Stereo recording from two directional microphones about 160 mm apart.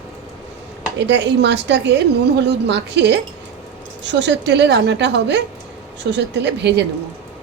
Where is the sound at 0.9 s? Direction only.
90° right.